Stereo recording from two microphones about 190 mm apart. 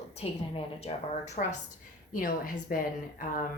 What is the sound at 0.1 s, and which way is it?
A woman's voice, 35° left (ahead or behind).